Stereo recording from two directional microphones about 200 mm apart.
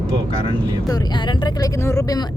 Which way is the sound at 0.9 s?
20° left (ahead or behind).